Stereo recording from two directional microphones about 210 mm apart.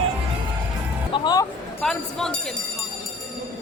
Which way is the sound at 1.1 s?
20° left (ahead or behind).